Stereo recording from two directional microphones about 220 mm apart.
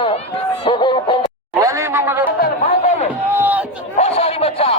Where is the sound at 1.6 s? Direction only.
15° right (ahead or behind).